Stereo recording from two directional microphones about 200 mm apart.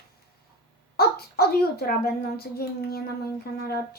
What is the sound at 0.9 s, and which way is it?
A woman's voice, 50° left (ahead or behind).